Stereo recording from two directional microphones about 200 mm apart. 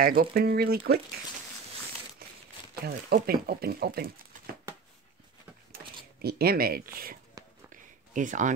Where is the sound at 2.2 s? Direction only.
50° right (ahead or behind).